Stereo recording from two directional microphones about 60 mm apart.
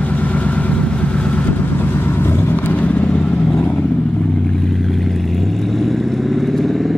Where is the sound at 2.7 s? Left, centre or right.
Left.